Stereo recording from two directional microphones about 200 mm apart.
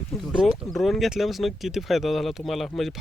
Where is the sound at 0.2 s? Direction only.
Centre (ahead or behind).